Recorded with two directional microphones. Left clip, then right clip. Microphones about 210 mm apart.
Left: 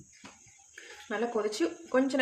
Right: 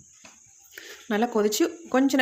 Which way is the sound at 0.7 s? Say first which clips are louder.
Right 7 dB; 50° right (ahead or behind).